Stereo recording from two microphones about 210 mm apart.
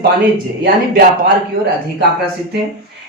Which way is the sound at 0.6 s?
50° right (ahead or behind).